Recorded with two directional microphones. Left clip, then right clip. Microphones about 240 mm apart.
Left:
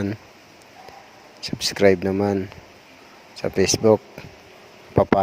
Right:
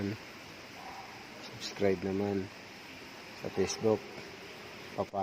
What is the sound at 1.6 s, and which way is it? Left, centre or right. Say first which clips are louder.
Speech: left 14 dB; left.